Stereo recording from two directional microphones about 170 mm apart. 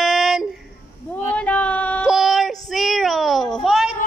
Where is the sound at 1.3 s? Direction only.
10° left (ahead or behind).